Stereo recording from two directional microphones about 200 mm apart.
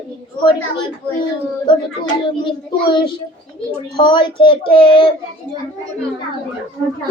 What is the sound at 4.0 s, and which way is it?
A child's voice, 25° left (ahead or behind).